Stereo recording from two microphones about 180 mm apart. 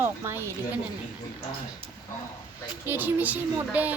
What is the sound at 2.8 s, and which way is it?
Child singing, 10° right (ahead or behind).